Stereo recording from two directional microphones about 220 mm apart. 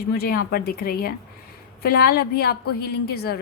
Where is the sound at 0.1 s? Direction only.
45° left (ahead or behind).